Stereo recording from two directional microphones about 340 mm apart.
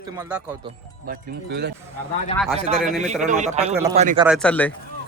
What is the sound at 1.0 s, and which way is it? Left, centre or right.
Speech, right.